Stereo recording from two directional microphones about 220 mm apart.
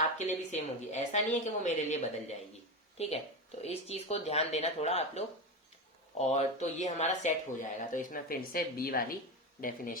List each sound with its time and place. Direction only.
0.5 s speech: 30° left (ahead or behind)